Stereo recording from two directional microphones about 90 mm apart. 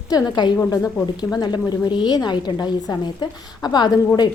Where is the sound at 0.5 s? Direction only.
35° left (ahead or behind).